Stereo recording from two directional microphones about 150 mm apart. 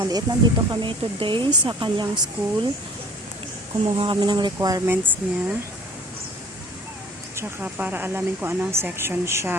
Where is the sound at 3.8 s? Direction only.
35° right (ahead or behind).